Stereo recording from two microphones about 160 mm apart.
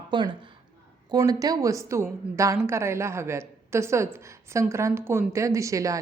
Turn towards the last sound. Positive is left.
turn(degrees=-20)  # may be behind; listen again after turning